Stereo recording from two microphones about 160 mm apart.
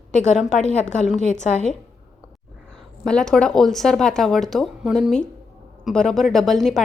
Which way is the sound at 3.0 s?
5° left (ahead or behind).